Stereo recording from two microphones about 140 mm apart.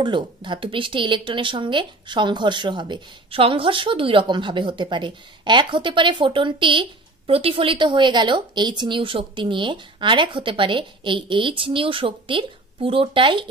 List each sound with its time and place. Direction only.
0.0 s speech: 35° right (ahead or behind)